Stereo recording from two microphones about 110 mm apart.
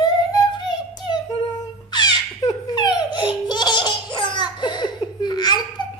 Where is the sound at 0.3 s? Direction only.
40° left (ahead or behind).